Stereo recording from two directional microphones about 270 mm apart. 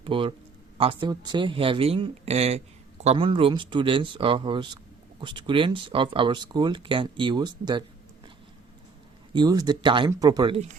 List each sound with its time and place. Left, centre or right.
0.0 s speech: centre
9.3 s speech: centre